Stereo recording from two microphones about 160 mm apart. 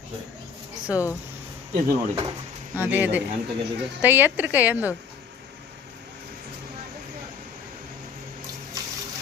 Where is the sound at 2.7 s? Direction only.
10° right (ahead or behind).